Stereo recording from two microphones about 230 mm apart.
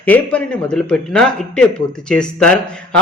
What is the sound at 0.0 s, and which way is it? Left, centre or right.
Speech, centre.